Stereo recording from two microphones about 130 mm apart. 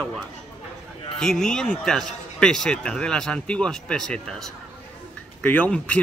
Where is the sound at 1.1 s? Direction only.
5° left (ahead or behind).